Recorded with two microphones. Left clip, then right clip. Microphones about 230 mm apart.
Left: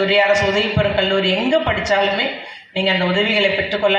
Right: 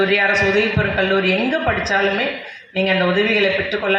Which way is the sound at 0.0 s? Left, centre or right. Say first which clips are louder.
Left 1 dB; left.